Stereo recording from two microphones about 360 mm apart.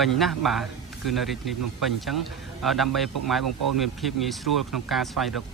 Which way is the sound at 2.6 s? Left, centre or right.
Centre.